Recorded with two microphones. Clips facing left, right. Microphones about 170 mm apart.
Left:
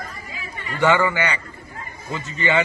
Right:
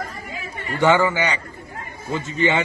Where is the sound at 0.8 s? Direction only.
20° right (ahead or behind).